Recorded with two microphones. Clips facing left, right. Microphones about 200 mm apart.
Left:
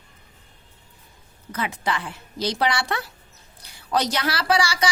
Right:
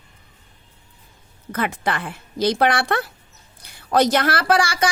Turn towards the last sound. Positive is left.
turn(degrees=-50)  # may be behind; listen again after turning